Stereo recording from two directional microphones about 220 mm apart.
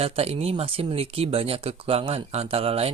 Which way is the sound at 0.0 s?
25° right (ahead or behind).